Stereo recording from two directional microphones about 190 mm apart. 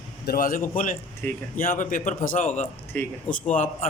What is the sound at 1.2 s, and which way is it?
Speech, 10° left (ahead or behind).